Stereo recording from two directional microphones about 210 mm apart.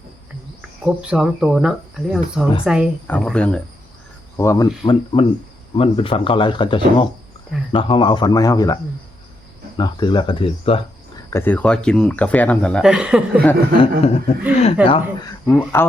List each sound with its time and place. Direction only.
0.9 s speech: 5° right (ahead or behind)
4.4 s speech: 15° left (ahead or behind)
11.3 s speech: 10° left (ahead or behind); by 13.4 s 5° right (ahead or behind)
14.0 s speech: 30° left (ahead or behind)
15.4 s speech: 10° left (ahead or behind)